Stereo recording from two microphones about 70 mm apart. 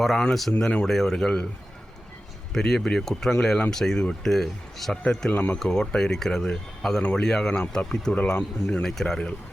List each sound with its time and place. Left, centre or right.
0.0 s speech: centre
2.5 s speech: centre
5.3 s speech: centre
5.5 s speech: centre